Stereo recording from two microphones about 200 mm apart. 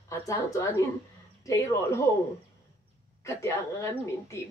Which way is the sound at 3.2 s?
15° left (ahead or behind).